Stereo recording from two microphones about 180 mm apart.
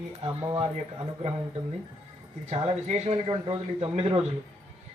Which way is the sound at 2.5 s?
35° right (ahead or behind).